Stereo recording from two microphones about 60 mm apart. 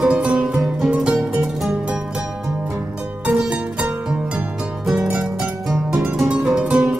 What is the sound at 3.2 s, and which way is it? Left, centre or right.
Music, centre.